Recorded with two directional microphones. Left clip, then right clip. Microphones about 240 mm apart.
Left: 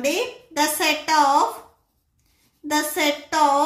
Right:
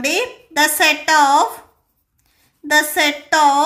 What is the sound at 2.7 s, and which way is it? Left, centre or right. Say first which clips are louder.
Speech: right 7 dB; right.